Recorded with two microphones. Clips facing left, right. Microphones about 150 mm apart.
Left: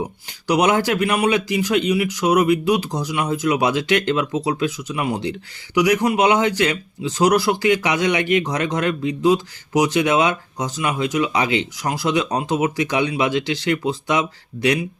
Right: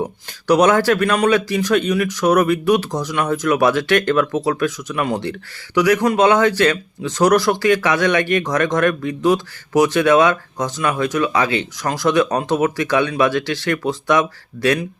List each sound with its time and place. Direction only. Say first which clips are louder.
0.0 s speech: right 3 dB; 15° left (ahead or behind)